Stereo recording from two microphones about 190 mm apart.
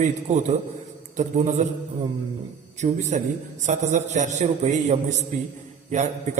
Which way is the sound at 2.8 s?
35° right (ahead or behind).